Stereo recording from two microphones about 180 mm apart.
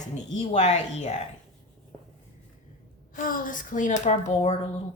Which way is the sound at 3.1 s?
50° left (ahead or behind).